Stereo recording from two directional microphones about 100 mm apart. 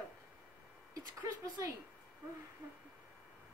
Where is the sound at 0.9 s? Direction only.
35° right (ahead or behind).